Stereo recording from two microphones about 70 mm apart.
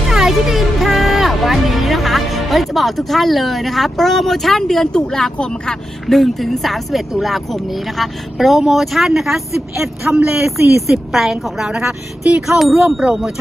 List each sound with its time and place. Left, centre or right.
0.1 s speech: centre
10.3 s speech: right
11.1 s speech: centre